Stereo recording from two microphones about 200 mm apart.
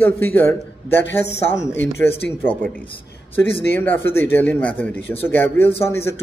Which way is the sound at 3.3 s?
10° left (ahead or behind).